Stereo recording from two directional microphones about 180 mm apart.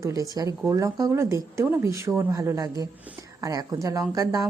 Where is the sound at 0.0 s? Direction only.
20° right (ahead or behind).